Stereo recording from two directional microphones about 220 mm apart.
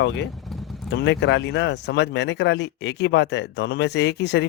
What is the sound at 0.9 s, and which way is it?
Speech, 55° left (ahead or behind).